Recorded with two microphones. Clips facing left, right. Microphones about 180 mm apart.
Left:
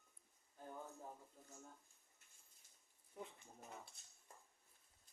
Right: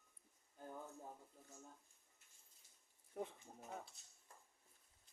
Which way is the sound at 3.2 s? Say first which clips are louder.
Right 6 dB; 60° right (ahead or behind).